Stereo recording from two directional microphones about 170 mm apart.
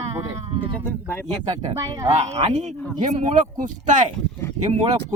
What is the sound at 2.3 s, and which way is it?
Speech, 40° right (ahead or behind).